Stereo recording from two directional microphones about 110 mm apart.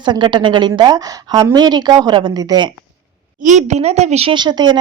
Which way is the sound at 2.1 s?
45° right (ahead or behind).